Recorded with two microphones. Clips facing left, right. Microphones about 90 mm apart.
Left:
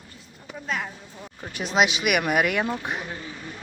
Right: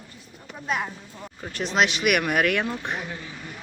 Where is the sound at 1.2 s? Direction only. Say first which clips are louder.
Right 2 dB; centre (ahead or behind).